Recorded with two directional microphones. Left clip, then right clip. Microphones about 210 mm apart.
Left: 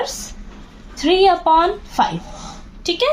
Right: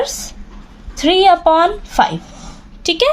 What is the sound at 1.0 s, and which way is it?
A woman's voice, 45° right (ahead or behind).